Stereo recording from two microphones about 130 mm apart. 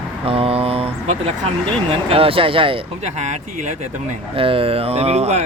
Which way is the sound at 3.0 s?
65° right (ahead or behind).